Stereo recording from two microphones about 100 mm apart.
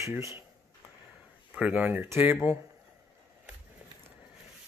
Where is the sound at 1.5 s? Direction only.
15° right (ahead or behind).